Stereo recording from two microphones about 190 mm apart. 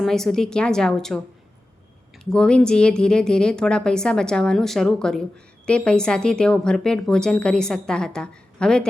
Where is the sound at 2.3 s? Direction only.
5° left (ahead or behind).